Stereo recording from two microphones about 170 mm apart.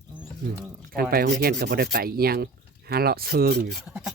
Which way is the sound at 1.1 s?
60° right (ahead or behind).